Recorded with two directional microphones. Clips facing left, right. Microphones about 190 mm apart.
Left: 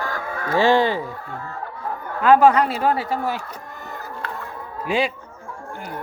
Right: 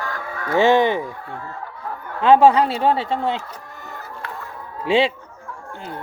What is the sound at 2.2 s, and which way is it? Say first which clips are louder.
Speech: right 1 dB; 30° right (ahead or behind).